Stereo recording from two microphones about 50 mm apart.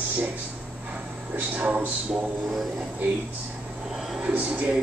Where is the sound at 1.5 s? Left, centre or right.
Right.